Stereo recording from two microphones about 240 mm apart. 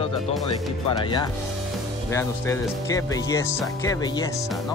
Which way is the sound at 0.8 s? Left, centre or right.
Centre.